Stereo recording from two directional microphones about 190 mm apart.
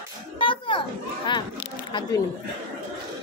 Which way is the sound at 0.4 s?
25° left (ahead or behind).